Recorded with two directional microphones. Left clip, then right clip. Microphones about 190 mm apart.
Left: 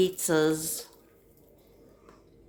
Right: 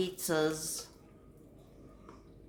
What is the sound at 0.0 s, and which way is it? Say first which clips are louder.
Speech: left 7 dB; 25° left (ahead or behind).